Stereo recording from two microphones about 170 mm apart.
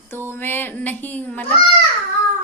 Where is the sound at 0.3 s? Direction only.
10° left (ahead or behind).